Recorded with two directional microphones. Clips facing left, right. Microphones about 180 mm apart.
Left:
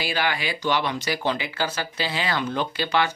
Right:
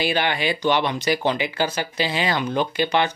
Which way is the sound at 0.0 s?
25° right (ahead or behind).